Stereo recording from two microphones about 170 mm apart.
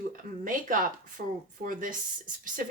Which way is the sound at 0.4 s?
55° right (ahead or behind).